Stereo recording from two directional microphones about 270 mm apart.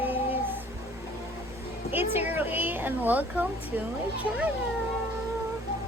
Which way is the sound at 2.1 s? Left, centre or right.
Centre.